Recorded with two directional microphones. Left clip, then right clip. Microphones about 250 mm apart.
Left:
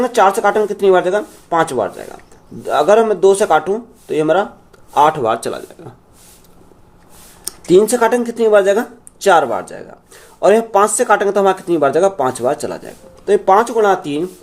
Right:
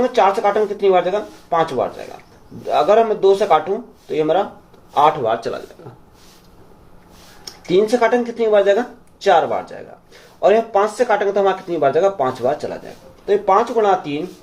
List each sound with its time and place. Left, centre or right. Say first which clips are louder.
0.0 s speech: left 3 dB; left
7.4 s speech: left 5 dB; left